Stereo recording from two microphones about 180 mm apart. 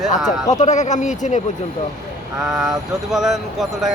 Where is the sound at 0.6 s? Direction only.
40° left (ahead or behind).